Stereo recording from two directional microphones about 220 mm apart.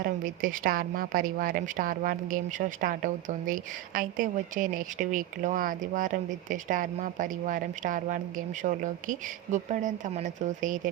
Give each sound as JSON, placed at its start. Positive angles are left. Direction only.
{"t": 0.0, "sound": "a woman's voice", "side_deg": -40}